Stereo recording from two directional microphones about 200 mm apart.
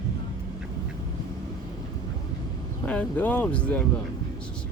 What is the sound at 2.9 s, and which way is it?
Speech, 5° left (ahead or behind).